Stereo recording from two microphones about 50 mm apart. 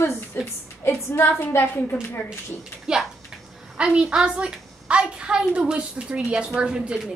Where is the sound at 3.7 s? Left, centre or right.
Centre.